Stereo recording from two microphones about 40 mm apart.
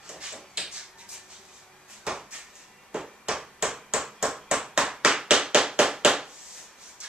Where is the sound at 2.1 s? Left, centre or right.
Right.